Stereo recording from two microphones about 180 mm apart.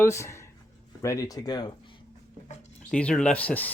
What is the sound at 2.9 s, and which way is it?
Speech, 5° left (ahead or behind).